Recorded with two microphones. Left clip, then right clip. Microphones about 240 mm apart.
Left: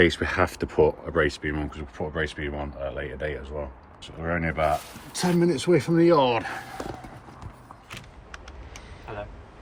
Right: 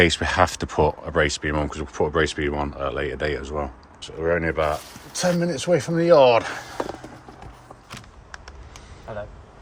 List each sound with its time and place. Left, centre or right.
0.0 s speech: centre
0.8 s speech: right
1.1 s speech: centre
4.0 s speech: centre